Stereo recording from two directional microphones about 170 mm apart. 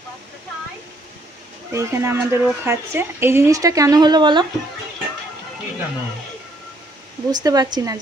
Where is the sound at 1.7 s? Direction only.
15° right (ahead or behind).